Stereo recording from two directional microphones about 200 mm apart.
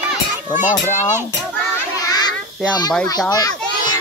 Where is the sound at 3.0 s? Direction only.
20° left (ahead or behind).